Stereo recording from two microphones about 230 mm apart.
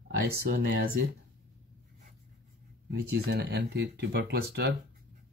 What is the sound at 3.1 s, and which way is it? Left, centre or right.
Speech, right.